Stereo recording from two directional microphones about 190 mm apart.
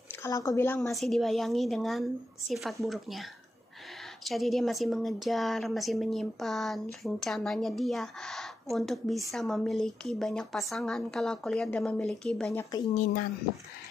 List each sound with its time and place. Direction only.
0.1 s speech: 15° left (ahead or behind)
0.7 s a woman's voice: centre (ahead or behind)
4.3 s a woman's voice: centre (ahead or behind)
12.9 s speech: 40° left (ahead or behind)